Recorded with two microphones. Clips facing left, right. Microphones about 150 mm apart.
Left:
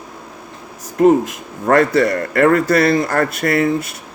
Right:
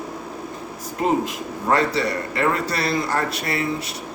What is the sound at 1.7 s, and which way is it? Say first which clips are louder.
A man's voice: left 7 dB; 55° left (ahead or behind).